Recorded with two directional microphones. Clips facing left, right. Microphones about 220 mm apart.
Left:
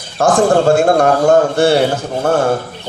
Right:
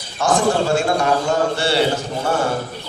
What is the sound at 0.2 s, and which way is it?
A man's voice, 50° left (ahead or behind).